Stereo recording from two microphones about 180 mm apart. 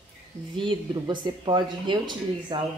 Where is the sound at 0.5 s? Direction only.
25° right (ahead or behind).